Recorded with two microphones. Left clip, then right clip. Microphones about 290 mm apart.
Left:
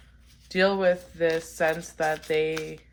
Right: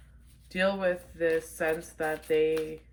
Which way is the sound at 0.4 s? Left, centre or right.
Centre.